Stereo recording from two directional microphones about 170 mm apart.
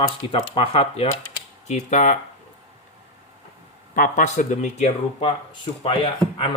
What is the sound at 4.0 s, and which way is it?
Speech, 50° left (ahead or behind).